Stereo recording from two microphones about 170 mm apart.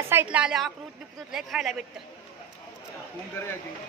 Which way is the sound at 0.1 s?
10° right (ahead or behind).